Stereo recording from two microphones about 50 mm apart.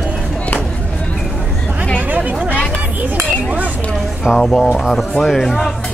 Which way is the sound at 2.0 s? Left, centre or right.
Right.